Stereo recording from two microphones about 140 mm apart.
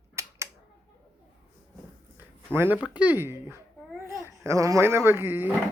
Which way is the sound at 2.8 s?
10° right (ahead or behind).